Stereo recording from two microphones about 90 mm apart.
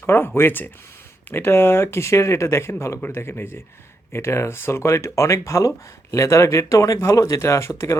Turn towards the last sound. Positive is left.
turn(degrees=30)  # may be behind; listen again after turning